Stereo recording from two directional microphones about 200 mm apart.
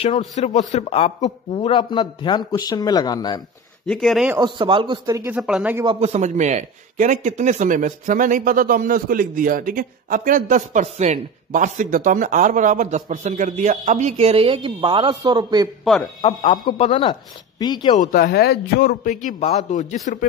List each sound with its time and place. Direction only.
0.4 s a man's voice: 35° left (ahead or behind); by 3.4 s 20° left (ahead or behind)
3.8 s speech: 5° left (ahead or behind)
4.4 s speech: 25° right (ahead or behind); by 5.9 s 5° right (ahead or behind)
5.9 s a man's voice: 30° right (ahead or behind)
16.6 s a man's voice: 25° left (ahead or behind)
17.9 s a man's voice: 45° left (ahead or behind)